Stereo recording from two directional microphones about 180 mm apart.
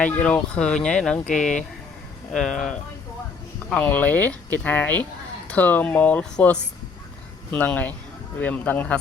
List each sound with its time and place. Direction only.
0.0 s speech: 10° left (ahead or behind)
1.3 s speech: 45° left (ahead or behind)
2.3 s speech: 5° left (ahead or behind)